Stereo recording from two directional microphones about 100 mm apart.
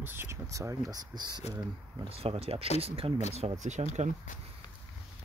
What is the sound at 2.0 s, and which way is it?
Speech, 75° right (ahead or behind).